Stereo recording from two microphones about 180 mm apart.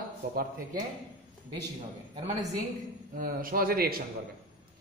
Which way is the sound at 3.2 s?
50° right (ahead or behind).